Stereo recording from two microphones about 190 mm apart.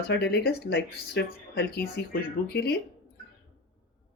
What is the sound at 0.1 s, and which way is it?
A woman's voice, 60° left (ahead or behind).